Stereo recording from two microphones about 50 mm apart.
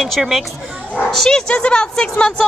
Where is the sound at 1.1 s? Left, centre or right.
Centre.